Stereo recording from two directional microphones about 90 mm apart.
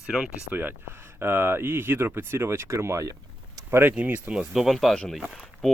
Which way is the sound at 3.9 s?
15° right (ahead or behind).